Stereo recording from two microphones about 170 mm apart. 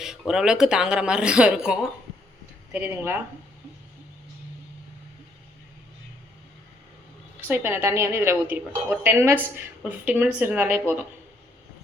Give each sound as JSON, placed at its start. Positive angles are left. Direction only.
{"t": 0.0, "sound": "a woman's voice", "side_deg": -5}
{"t": 7.4, "sound": "a woman's voice", "side_deg": -10}